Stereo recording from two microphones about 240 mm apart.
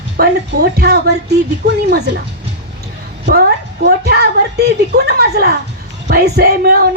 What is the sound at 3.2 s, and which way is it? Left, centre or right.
Speech, right.